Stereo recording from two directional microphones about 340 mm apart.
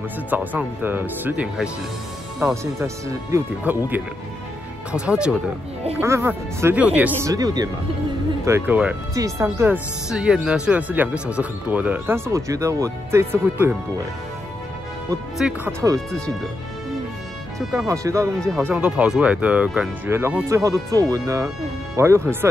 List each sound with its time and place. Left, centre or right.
0.3 s speech: centre
15.0 s speech: centre
17.6 s speech: centre